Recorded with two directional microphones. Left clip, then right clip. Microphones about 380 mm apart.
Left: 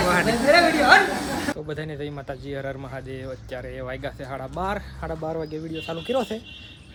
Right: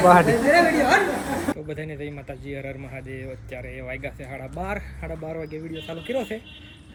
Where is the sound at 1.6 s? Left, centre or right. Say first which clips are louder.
Left 1 dB; centre.